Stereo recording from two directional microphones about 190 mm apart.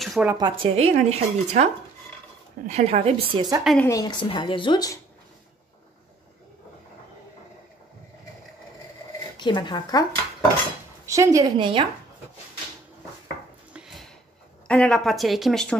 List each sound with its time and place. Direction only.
0.0 s a sound: centre (ahead or behind)
0.4 s a woman's voice: 30° right (ahead or behind)
3.6 s speech: 5° left (ahead or behind)
3.9 s a woman's voice: 20° left (ahead or behind)
9.4 s a woman's voice: 25° left (ahead or behind)
11.1 s a woman's voice: 15° right (ahead or behind)
13.7 s a sound: centre (ahead or behind)
14.7 s speech: 5° left (ahead or behind)